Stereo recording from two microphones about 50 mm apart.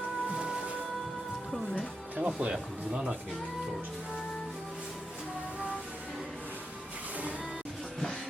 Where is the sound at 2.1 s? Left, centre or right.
Right.